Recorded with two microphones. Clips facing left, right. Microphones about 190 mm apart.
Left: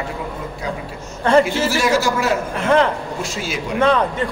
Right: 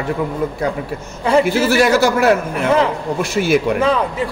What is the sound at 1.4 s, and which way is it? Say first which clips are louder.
A man's voice: right 5 dB; 60° right (ahead or behind).